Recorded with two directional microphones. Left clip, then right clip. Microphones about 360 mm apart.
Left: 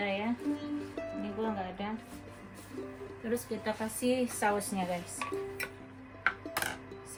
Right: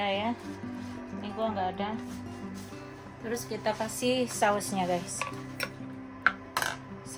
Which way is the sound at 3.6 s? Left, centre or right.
Centre.